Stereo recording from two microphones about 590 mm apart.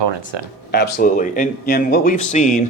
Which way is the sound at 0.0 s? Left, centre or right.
Right.